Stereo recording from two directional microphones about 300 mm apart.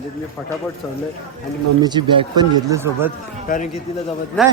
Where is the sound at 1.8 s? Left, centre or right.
Centre.